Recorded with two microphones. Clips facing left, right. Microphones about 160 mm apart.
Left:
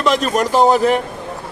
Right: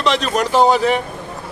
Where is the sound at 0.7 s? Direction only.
45° left (ahead or behind).